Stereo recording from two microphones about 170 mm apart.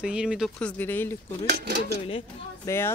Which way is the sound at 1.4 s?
75° right (ahead or behind).